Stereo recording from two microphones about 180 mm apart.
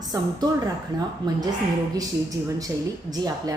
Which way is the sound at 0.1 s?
20° right (ahead or behind).